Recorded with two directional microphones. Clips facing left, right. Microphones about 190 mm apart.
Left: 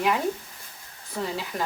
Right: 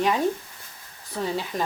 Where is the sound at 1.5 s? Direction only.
15° right (ahead or behind).